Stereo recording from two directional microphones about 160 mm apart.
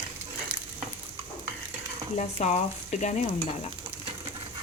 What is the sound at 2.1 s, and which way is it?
Stir, 45° left (ahead or behind).